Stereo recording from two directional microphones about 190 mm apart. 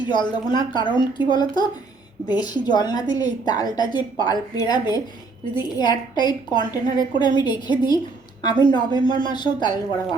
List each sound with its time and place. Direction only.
0.1 s a woman's voice: 25° left (ahead or behind)